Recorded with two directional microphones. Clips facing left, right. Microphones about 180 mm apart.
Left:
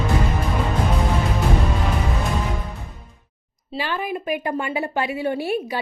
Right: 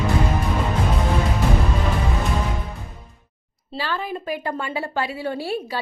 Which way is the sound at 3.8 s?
15° left (ahead or behind).